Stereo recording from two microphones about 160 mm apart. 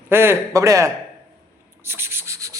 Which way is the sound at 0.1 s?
15° right (ahead or behind).